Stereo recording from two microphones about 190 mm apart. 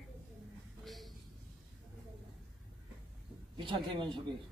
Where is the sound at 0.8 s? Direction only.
Centre (ahead or behind).